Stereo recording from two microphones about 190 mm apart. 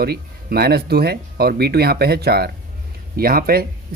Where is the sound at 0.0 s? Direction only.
55° right (ahead or behind).